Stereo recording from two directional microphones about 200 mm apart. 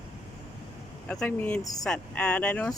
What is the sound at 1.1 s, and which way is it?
Speech, 5° left (ahead or behind).